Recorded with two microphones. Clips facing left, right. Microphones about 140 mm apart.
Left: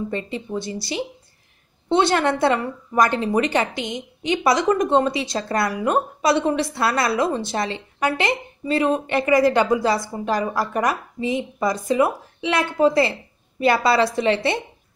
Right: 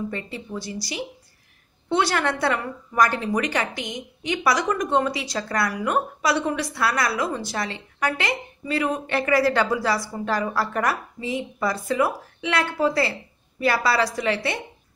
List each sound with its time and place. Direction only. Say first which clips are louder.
0.1 s a woman's voice: left 5 dB; 25° left (ahead or behind)